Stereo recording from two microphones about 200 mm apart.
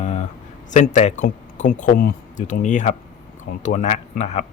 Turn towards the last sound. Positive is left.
turn(degrees=35)  # may be behind; listen again after turning